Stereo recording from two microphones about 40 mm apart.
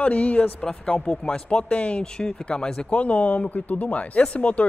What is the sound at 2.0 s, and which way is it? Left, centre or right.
Speech, centre.